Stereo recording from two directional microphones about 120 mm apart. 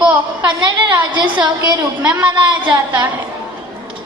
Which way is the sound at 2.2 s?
40° right (ahead or behind).